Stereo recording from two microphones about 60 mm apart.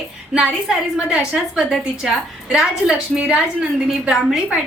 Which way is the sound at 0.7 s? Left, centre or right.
Centre.